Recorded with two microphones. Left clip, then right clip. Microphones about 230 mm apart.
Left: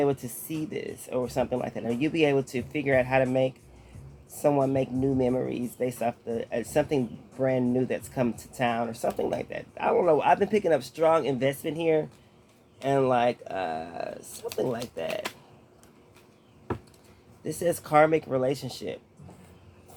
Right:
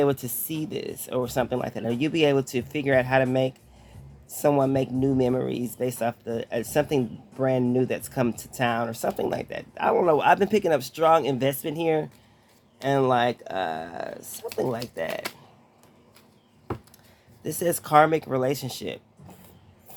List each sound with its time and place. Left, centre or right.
0.0 s speech: right
17.4 s speech: right